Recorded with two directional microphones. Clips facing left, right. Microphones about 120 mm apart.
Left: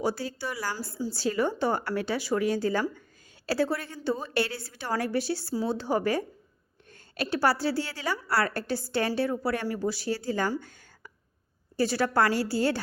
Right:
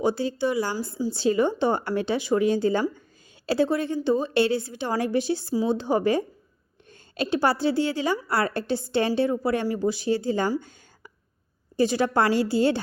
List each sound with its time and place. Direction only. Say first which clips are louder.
0.0 s a woman's voice: right 6 dB; 20° right (ahead or behind)
10.6 s a sound: right 1 dB; 20° right (ahead or behind)
11.8 s a woman's voice: right 3 dB; 20° right (ahead or behind)